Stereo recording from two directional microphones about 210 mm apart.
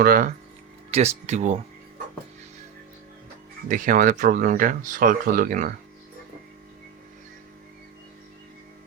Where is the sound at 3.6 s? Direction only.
40° right (ahead or behind).